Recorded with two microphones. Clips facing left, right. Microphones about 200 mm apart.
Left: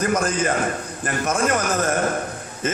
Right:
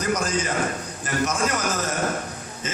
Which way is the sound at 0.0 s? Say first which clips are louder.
Left 3 dB; 55° left (ahead or behind).